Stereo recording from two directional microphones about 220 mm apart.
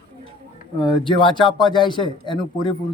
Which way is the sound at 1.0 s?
20° left (ahead or behind).